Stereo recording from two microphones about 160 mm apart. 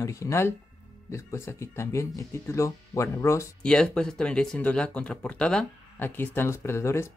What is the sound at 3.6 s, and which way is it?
Speech, 5° left (ahead or behind).